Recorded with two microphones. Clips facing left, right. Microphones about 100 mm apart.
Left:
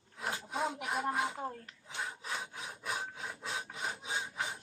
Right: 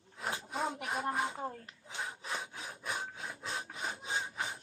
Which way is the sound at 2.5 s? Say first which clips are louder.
Even; centre (ahead or behind).